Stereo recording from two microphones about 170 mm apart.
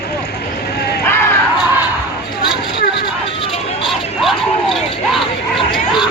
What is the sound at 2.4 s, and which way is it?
Vehicle, 25° left (ahead or behind).